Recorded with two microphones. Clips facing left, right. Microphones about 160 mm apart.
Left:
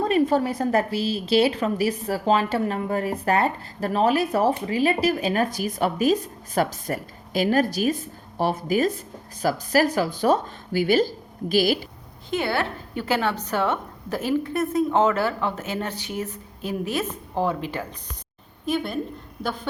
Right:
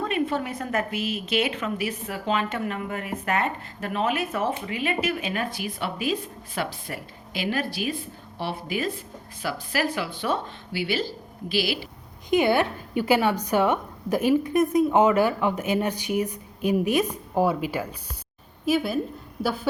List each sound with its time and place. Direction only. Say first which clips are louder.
0.0 s a woman's voice: left 6 dB; 35° left (ahead or behind)
12.3 s a woman's voice: right 4 dB; 15° right (ahead or behind)